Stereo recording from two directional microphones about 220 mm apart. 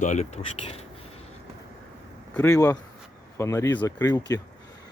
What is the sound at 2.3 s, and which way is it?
Speech, 15° left (ahead or behind).